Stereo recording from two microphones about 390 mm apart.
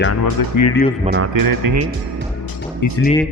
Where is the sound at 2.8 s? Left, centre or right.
Left.